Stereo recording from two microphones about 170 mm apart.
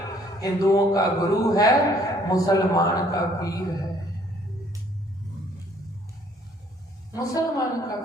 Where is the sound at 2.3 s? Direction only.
20° left (ahead or behind).